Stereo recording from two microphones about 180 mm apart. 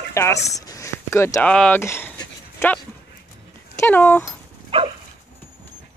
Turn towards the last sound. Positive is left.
turn(degrees=-30)  # may be behind; listen again after turning